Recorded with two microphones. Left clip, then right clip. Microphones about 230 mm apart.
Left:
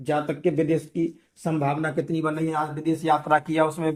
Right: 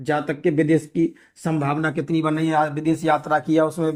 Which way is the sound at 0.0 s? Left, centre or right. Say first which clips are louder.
Right 2 dB; right.